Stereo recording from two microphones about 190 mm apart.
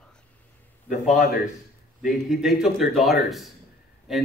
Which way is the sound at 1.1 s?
45° left (ahead or behind).